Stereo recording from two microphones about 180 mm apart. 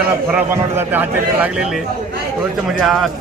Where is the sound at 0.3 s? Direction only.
10° right (ahead or behind).